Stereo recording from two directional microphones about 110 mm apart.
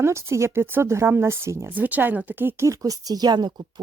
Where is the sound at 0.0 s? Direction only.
25° right (ahead or behind).